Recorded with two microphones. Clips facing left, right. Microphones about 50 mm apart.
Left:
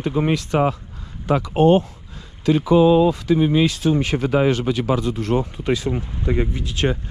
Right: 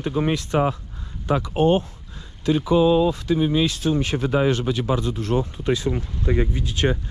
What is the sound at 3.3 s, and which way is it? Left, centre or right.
Speech, left.